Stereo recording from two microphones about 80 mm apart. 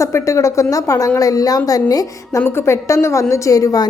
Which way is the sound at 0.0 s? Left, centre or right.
Left.